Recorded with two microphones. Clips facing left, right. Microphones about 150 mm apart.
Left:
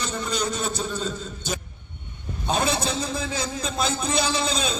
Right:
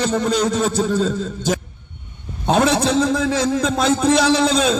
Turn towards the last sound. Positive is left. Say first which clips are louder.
# right 10 dB
turn(degrees=-85)